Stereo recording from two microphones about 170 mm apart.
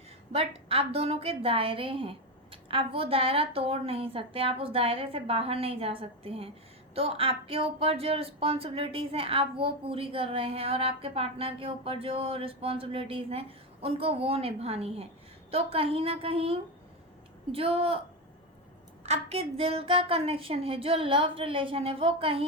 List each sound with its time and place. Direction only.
0.3 s speech: 35° right (ahead or behind)
19.0 s speech: 40° right (ahead or behind)